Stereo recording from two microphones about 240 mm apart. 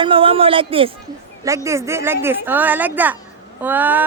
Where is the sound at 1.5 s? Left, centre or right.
Centre.